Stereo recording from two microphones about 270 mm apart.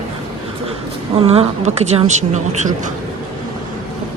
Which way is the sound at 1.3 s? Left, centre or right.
Right.